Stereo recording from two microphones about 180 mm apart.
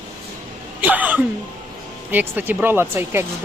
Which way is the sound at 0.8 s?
10° right (ahead or behind).